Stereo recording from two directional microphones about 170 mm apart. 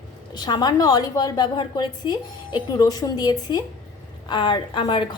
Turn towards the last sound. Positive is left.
turn(degrees=25)  # may be behind; listen again after turning